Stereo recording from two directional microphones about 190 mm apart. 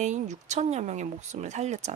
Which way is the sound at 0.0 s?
40° right (ahead or behind).